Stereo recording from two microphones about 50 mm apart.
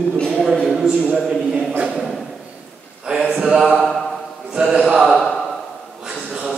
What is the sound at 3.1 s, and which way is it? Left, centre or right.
Speech, centre.